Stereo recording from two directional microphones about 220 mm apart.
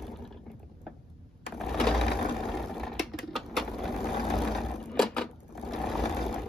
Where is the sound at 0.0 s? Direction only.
Centre (ahead or behind).